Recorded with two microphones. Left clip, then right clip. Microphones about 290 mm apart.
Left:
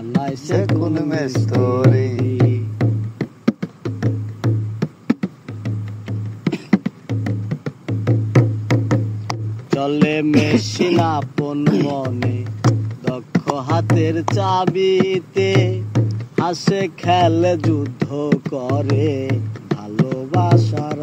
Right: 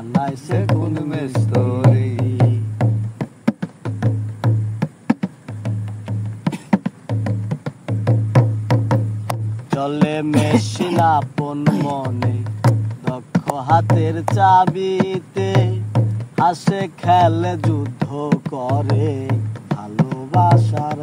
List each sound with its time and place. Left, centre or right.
0.1 s music: right
1.8 s music: right